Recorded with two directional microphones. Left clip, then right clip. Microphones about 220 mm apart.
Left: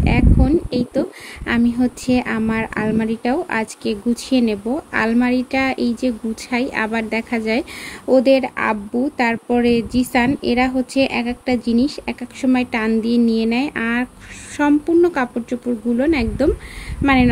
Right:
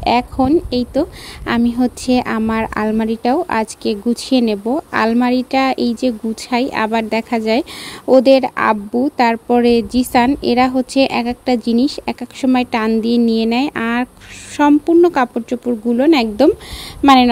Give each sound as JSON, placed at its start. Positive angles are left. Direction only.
{"t": 0.0, "sound": "a woman's voice", "side_deg": -25}